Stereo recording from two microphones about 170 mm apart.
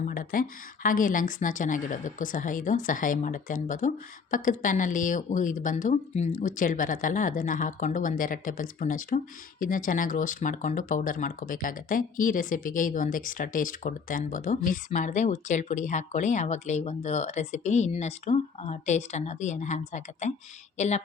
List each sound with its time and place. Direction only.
0.0 s speech: 55° left (ahead or behind)